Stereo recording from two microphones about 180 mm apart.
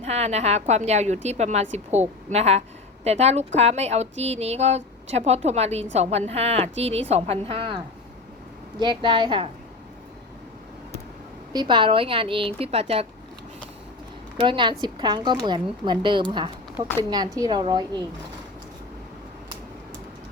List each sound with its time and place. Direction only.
0.0 s a woman's voice: 35° right (ahead or behind)
8.8 s a woman's voice: 25° right (ahead or behind)
11.5 s a woman's voice: 25° right (ahead or behind)
14.4 s a woman's voice: 25° right (ahead or behind)